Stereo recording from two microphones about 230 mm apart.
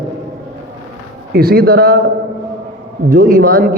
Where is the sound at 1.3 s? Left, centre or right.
Right.